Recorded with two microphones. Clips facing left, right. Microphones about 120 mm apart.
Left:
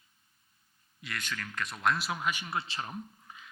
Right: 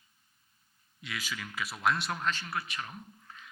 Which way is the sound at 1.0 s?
Centre (ahead or behind).